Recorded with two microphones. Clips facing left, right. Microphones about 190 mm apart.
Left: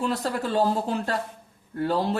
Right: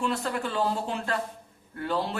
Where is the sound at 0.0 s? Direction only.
35° left (ahead or behind).